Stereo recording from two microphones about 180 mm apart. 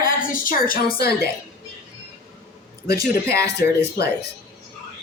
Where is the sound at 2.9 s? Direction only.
15° right (ahead or behind).